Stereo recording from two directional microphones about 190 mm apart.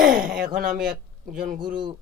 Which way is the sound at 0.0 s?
45° right (ahead or behind).